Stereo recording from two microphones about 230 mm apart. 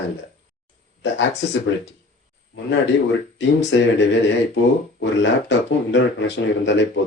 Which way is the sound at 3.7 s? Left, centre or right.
Left.